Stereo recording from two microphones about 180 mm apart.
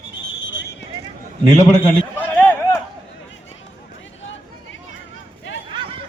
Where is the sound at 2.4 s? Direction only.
10° left (ahead or behind).